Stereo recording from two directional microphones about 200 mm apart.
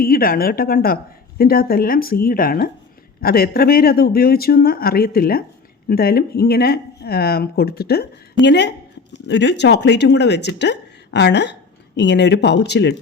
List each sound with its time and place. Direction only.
0.0 s a woman's voice: 50° left (ahead or behind)